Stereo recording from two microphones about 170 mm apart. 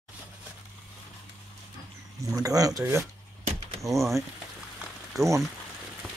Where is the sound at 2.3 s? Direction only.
20° right (ahead or behind).